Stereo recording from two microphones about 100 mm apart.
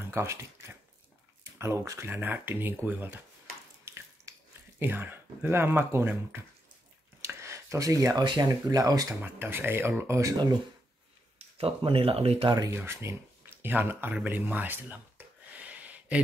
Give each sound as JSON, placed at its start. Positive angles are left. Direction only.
{"t": 0.1, "sound": "speech", "side_deg": -25}
{"t": 3.8, "sound": "a sound", "side_deg": -25}
{"t": 8.2, "sound": "speech", "side_deg": -45}
{"t": 9.2, "sound": "speech", "side_deg": -20}
{"t": 11.3, "sound": "speech", "side_deg": -75}
{"t": 12.7, "sound": "a sound", "side_deg": -25}